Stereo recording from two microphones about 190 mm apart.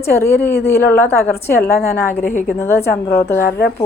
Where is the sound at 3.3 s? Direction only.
50° left (ahead or behind).